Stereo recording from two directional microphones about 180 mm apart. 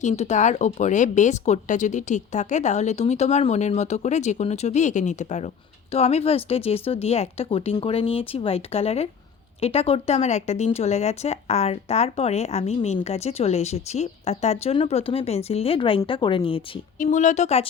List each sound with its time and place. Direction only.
0.0 s speech: 40° left (ahead or behind)
17.0 s speech: 45° left (ahead or behind)